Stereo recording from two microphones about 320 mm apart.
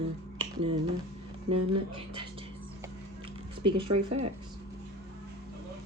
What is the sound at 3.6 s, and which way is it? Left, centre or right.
Speech, right.